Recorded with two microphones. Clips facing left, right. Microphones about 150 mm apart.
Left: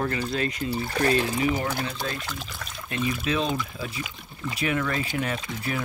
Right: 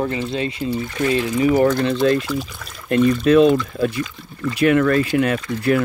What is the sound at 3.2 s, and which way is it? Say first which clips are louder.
Speech: right 15 dB; 60° right (ahead or behind).